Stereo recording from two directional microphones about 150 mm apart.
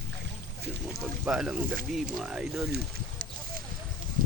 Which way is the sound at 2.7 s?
90° right.